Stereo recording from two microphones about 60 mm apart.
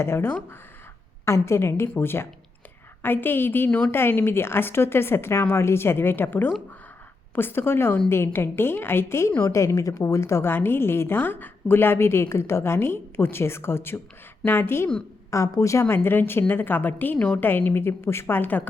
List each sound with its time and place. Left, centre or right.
0.0 s a woman's voice: left
3.7 s a woman's voice: left
3.9 s a woman's voice: left
15.3 s speech: left
15.8 s a woman's voice: left